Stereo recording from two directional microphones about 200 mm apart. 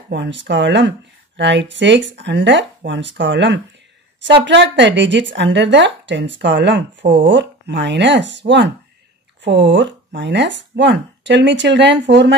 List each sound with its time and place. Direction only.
0.1 s speech: 60° right (ahead or behind)